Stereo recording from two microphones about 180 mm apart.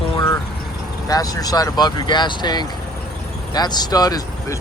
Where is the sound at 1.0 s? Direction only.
20° left (ahead or behind).